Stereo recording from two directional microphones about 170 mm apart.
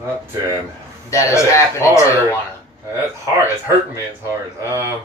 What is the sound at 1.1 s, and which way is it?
Speech, 15° left (ahead or behind).